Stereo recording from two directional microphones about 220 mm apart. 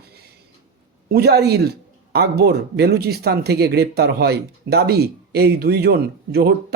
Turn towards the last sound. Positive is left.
turn(degrees=-45)  # may be behind; listen again after turning